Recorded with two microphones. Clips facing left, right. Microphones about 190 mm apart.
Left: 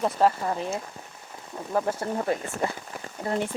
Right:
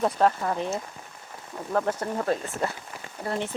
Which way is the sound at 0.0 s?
5° left (ahead or behind).